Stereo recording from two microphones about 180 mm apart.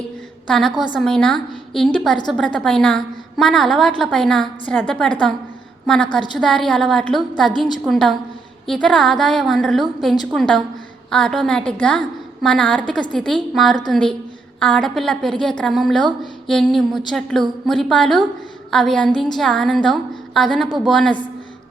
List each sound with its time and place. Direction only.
0.4 s a woman's voice: centre (ahead or behind)